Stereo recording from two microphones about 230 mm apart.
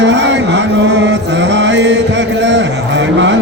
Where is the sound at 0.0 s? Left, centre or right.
Right.